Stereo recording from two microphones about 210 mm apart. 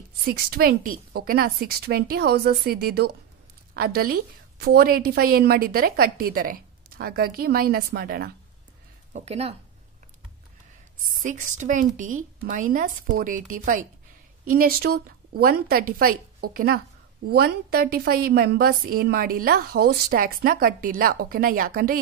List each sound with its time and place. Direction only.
0.3 s a woman's voice: 45° right (ahead or behind)
9.1 s speech: 30° right (ahead or behind)
11.0 s a woman's voice: 40° right (ahead or behind)